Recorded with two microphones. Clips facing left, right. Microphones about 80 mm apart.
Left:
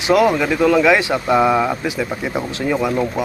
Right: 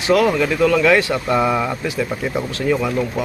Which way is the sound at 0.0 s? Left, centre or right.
Centre.